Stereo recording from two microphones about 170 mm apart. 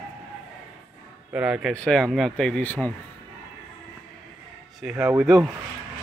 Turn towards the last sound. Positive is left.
turn(degrees=0)  # may be behind; listen again after turning